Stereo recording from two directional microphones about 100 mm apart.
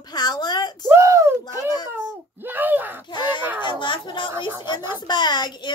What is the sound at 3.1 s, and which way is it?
Speech, 50° left (ahead or behind).